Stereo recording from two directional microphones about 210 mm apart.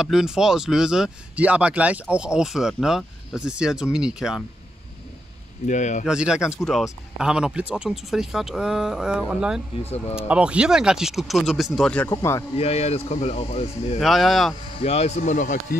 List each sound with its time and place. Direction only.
0.0 s speech: centre (ahead or behind)
5.7 s speech: 35° left (ahead or behind)
6.0 s speech: 5° right (ahead or behind); by 12.4 s 15° left (ahead or behind)
12.5 s speech: 30° left (ahead or behind)
13.9 s speech: centre (ahead or behind)
14.8 s speech: 30° left (ahead or behind)